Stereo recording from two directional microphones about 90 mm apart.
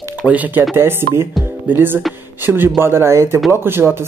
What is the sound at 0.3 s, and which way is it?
Speech, 20° right (ahead or behind).